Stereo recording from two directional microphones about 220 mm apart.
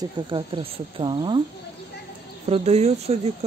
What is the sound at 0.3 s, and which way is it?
Speech, 25° right (ahead or behind).